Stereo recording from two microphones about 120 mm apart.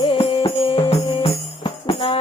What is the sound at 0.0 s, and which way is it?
Music, 50° left (ahead or behind).